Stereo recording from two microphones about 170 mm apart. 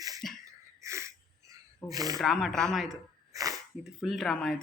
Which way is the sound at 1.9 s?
20° right (ahead or behind).